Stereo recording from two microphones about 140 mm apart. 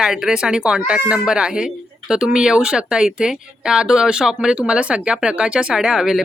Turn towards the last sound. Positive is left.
turn(degrees=-5)  # may be behind; listen again after turning